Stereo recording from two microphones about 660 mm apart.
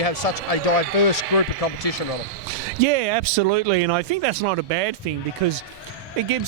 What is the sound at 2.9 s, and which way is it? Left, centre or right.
Speech, right.